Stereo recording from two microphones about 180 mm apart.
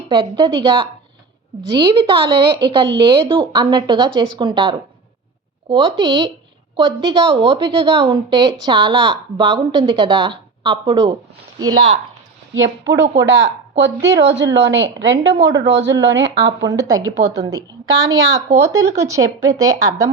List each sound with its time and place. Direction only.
0.1 s a woman's voice: 25° right (ahead or behind)
12.5 s speech: 80° right
14.5 s a woman's voice: 90° right
15.4 s a woman's voice: 20° right (ahead or behind)
16.0 s speech: 90° right
16.6 s a woman's voice: 20° right (ahead or behind)